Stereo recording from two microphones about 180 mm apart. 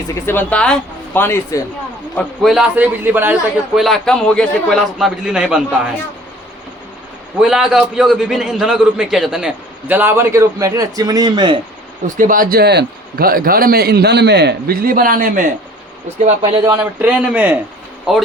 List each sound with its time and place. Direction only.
0.1 s speech: 10° left (ahead or behind)
2.1 s a man's voice: centre (ahead or behind)
3.8 s a man's voice: centre (ahead or behind)
7.4 s a man's voice: 5° right (ahead or behind); by 11.6 s 25° right (ahead or behind)
12.0 s a man's voice: 45° right (ahead or behind)
16.4 s speech: 25° right (ahead or behind)
16.7 s a man's voice: 10° right (ahead or behind)